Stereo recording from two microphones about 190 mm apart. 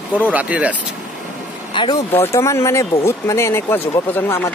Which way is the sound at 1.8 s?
25° left (ahead or behind).